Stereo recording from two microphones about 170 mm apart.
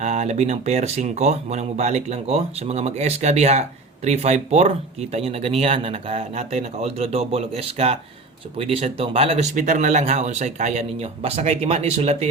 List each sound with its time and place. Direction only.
0.0 s speech: 40° right (ahead or behind)
9.6 s speech: 50° right (ahead or behind)